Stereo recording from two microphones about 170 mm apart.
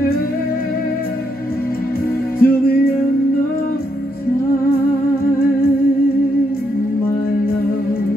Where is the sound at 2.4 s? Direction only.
60° left (ahead or behind).